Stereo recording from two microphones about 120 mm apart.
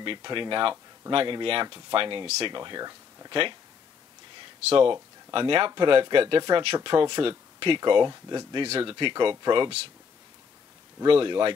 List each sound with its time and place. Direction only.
0.0 s speech: 45° right (ahead or behind)
4.6 s speech: 50° right (ahead or behind)
11.1 s speech: 45° right (ahead or behind)